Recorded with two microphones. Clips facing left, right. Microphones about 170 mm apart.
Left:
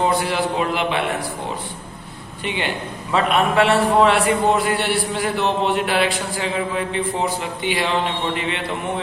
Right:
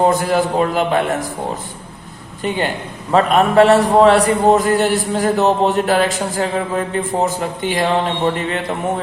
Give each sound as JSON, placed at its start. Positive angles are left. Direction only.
{"t": 0.0, "sound": "a man's voice", "side_deg": -45}
{"t": 2.4, "sound": "a man's voice", "side_deg": -40}